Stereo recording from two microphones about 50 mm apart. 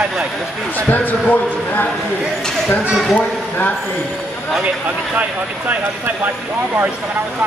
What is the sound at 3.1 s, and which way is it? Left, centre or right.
Speech, left.